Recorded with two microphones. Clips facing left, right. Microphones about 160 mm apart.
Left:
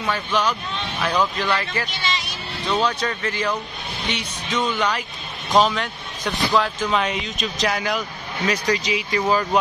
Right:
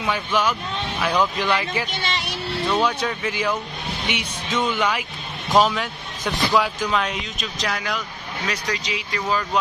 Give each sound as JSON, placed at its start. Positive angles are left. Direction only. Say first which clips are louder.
{"t": 0.0, "sound": "speech", "louder": "even", "side_deg": -10}
{"t": 1.9, "sound": "a sound", "louder": "even", "side_deg": -55}
{"t": 2.6, "sound": "speech", "louder": "even", "side_deg": -10}